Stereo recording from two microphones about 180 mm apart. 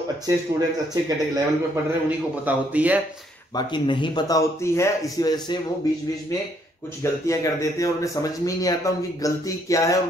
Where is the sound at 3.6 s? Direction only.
25° left (ahead or behind).